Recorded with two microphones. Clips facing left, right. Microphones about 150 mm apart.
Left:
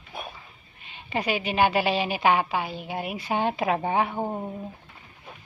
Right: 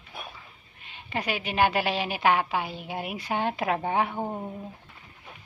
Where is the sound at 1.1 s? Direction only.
15° left (ahead or behind).